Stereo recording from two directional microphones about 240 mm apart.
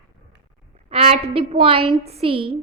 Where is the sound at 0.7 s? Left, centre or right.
Right.